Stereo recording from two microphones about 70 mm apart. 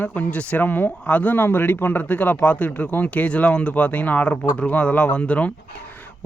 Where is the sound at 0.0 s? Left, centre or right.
Centre.